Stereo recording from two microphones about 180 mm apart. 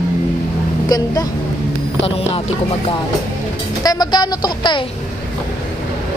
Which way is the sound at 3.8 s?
20° left (ahead or behind).